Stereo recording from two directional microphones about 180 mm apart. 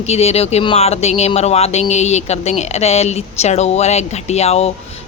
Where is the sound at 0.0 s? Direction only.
35° left (ahead or behind).